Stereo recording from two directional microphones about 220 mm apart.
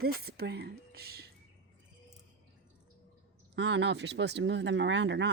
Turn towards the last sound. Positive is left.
turn(degrees=-55)  # may be behind; listen again after turning